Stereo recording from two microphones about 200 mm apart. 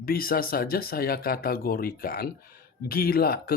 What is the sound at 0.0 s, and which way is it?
Speech, 45° left (ahead or behind).